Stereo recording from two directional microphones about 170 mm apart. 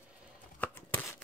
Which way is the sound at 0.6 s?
10° left (ahead or behind).